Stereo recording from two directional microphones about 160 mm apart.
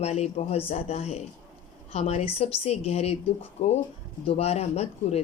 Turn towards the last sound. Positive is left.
turn(degrees=40)  # may be behind; listen again after turning